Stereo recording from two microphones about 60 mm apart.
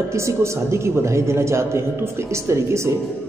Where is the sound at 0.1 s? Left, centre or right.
Right.